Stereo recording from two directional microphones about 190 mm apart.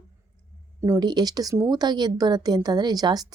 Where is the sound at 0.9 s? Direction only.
20° right (ahead or behind).